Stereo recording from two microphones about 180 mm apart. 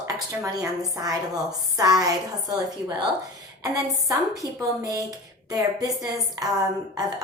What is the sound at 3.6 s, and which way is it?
A woman's voice, 20° right (ahead or behind).